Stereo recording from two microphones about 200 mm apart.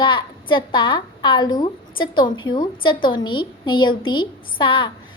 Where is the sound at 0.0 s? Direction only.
25° left (ahead or behind).